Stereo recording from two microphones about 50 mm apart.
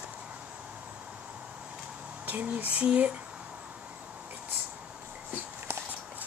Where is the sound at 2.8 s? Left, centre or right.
Right.